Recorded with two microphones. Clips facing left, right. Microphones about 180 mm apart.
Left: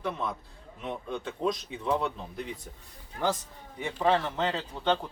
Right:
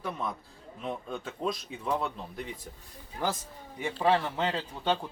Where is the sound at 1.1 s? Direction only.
Centre (ahead or behind).